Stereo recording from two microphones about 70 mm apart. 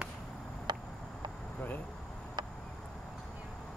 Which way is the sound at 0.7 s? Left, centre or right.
Right.